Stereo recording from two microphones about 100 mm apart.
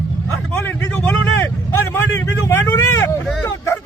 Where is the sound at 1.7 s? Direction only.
20° left (ahead or behind).